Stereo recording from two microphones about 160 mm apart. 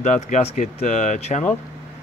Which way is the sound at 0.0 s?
45° left (ahead or behind).